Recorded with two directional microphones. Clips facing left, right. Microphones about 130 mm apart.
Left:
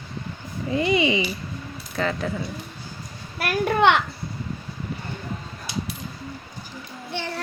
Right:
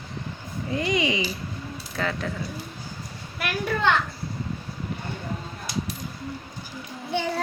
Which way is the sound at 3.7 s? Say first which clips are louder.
Left 5 dB; 70° left (ahead or behind).